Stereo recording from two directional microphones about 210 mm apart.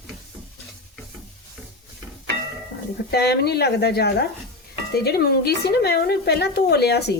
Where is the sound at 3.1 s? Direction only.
50° left (ahead or behind).